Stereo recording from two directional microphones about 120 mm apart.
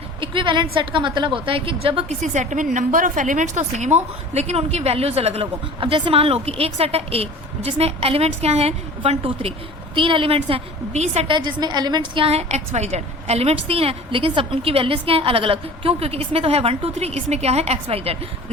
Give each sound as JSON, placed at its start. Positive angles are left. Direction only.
{"t": 0.2, "sound": "a woman's voice", "side_deg": -45}
{"t": 2.2, "sound": "a woman's voice", "side_deg": -90}
{"t": 9.9, "sound": "a woman's voice", "side_deg": -45}
{"t": 11.3, "sound": "a woman's voice", "side_deg": -40}
{"t": 12.2, "sound": "a woman's voice", "side_deg": -60}